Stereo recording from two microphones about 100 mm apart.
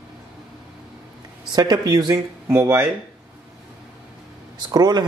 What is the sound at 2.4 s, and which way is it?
Speech, 25° right (ahead or behind).